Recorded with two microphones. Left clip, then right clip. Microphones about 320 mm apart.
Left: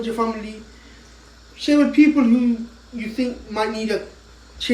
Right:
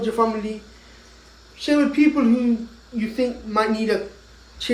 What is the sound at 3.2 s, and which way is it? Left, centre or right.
Speech, centre.